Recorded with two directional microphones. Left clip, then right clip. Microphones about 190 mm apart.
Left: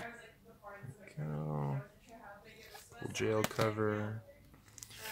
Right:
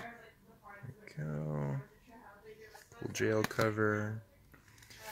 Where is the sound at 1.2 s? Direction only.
20° right (ahead or behind).